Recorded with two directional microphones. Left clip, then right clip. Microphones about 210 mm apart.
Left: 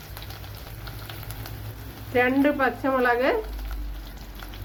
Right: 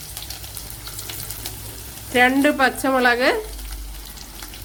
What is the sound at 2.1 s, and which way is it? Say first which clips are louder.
Speech: right 5 dB; 60° right (ahead or behind).